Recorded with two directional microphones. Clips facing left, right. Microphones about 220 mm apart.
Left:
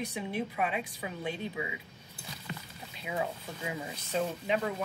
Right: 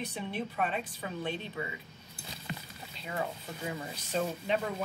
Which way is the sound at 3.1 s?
10° left (ahead or behind).